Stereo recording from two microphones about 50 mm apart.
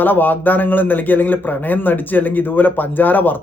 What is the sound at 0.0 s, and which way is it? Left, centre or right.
A man's voice, left.